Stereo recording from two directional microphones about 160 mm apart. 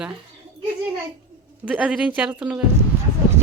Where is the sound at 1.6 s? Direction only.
10° right (ahead or behind).